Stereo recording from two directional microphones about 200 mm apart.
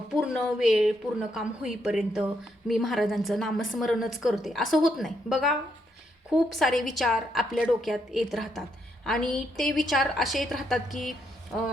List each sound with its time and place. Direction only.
0.1 s a woman's voice: centre (ahead or behind)